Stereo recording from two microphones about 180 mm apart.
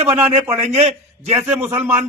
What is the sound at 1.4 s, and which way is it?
Speech, 10° right (ahead or behind).